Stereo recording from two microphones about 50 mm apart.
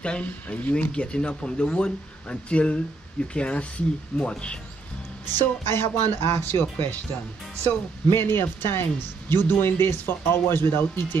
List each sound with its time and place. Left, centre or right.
0.0 s speech: left
5.3 s speech: left
7.6 s speech: left